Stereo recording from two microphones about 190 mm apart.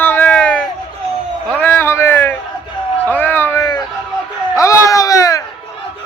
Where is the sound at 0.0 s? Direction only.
10° left (ahead or behind).